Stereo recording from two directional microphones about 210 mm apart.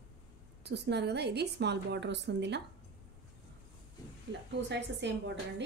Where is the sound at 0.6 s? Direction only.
55° right (ahead or behind).